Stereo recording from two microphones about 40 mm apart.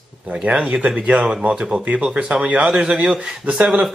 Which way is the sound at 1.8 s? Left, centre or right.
Right.